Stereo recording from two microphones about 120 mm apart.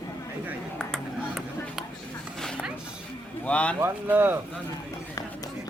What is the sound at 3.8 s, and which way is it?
Speech, 15° right (ahead or behind).